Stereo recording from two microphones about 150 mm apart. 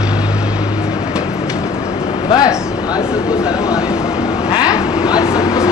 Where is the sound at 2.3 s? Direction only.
25° left (ahead or behind).